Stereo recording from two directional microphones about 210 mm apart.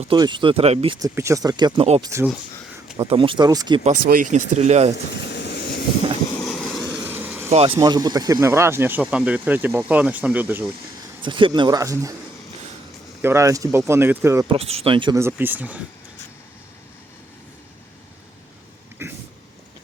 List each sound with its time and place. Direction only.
0.0 s speech: 25° right (ahead or behind)
1.0 s speech: 15° right (ahead or behind)
3.8 s speech: 40° right (ahead or behind)
5.1 s a sound: 55° left (ahead or behind)
6.3 s vehicle: centre (ahead or behind)
6.8 s vehicle: 15° right (ahead or behind)
7.5 s speech: 25° right (ahead or behind); by 10.7 s 5° right (ahead or behind)
11.2 s speech: 25° right (ahead or behind)
13.2 s speech: 15° right (ahead or behind)
14.4 s speech: 25° right (ahead or behind)
15.2 s speech: 10° right (ahead or behind)